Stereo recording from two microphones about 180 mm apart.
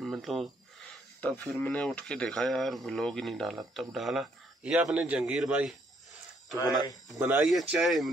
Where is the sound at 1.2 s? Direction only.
10° left (ahead or behind).